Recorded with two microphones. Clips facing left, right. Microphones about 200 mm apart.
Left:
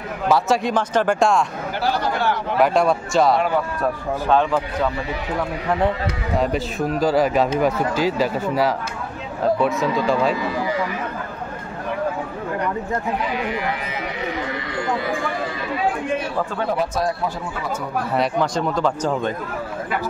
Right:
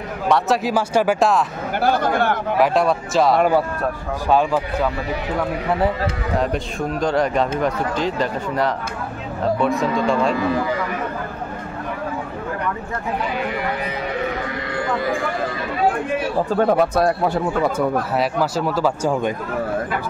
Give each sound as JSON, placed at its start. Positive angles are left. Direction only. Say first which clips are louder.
{"t": 0.3, "sound": "a man's voice", "louder": "even", "side_deg": -5}
{"t": 1.8, "sound": "speech", "louder": "right 4 dB", "side_deg": -55}
{"t": 2.6, "sound": "a man's voice", "louder": "left 1 dB", "side_deg": 0}
{"t": 3.3, "sound": "speech", "louder": "right 4 dB", "side_deg": -45}
{"t": 4.3, "sound": "speech", "louder": "right 1 dB", "side_deg": -10}
{"t": 5.7, "sound": "a man's voice", "louder": "left 1 dB", "side_deg": -5}
{"t": 16.4, "sound": "speech", "louder": "right 6 dB", "side_deg": -50}
{"t": 18.1, "sound": "speech", "louder": "even", "side_deg": -5}